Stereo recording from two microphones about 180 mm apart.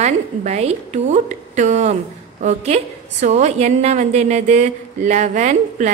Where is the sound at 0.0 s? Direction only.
40° right (ahead or behind).